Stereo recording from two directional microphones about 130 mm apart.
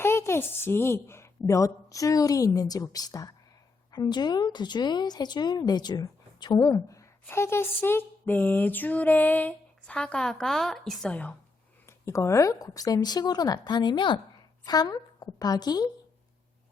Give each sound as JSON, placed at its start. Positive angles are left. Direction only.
{"t": 0.0, "sound": "speech", "side_deg": 20}
{"t": 11.9, "sound": "a woman's voice", "side_deg": 20}